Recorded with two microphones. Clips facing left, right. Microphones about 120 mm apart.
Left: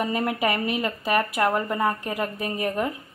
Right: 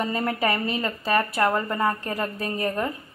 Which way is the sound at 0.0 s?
5° left (ahead or behind).